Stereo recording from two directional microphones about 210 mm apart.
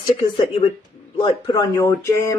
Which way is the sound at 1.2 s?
15° left (ahead or behind).